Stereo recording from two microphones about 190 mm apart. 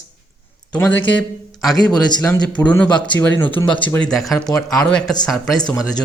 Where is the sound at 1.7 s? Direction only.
20° left (ahead or behind).